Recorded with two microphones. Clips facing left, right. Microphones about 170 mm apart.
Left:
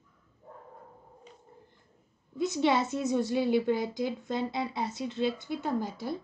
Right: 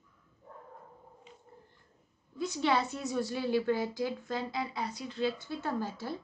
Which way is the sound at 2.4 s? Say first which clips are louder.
Left 3 dB; 20° left (ahead or behind).